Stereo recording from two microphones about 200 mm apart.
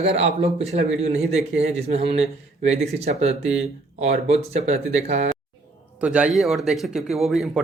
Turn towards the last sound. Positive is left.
turn(degrees=0)  # may be behind; listen again after turning